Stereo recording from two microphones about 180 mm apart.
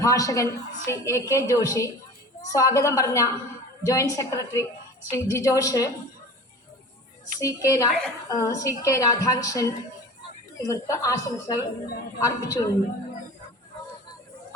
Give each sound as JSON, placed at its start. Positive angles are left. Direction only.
{"t": 0.0, "sound": "a woman's voice", "side_deg": 20}
{"t": 7.3, "sound": "a woman's voice", "side_deg": 20}